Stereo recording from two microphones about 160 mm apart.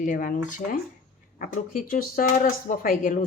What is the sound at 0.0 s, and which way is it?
Speech, 60° left (ahead or behind).